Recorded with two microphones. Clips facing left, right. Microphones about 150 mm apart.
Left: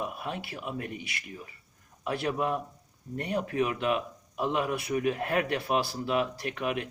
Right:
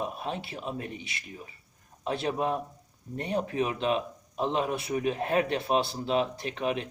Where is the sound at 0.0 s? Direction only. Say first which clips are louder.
Right 1 dB; 25° right (ahead or behind).